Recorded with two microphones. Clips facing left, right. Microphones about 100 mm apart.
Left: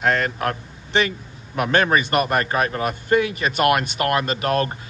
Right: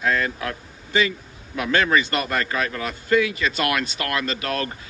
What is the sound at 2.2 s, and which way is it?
A man's voice, 30° left (ahead or behind).